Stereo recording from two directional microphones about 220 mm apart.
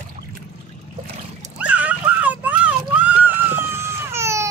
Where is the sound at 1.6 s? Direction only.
5° right (ahead or behind).